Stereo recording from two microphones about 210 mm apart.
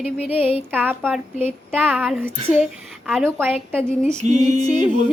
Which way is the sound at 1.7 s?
5° right (ahead or behind).